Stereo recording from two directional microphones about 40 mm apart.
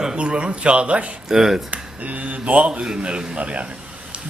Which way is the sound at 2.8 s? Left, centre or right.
Right.